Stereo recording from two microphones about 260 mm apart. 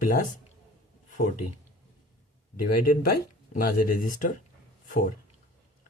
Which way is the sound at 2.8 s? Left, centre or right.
Left.